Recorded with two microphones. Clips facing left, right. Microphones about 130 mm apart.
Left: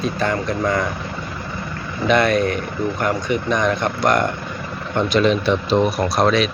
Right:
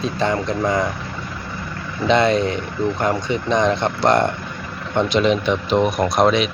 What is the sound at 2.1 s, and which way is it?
Speech, 20° right (ahead or behind).